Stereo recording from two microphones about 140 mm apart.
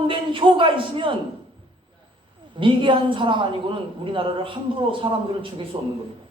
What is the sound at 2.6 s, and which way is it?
A woman's voice, 35° right (ahead or behind).